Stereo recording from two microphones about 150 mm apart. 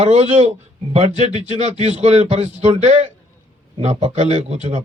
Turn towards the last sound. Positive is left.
turn(degrees=-50)  # may be behind; listen again after turning